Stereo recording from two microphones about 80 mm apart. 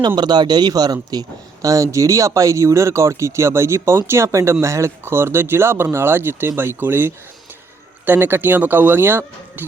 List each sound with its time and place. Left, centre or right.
0.2 s a man's voice: right
1.6 s speech: right